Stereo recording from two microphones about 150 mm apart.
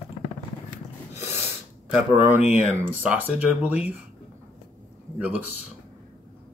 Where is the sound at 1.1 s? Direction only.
15° right (ahead or behind).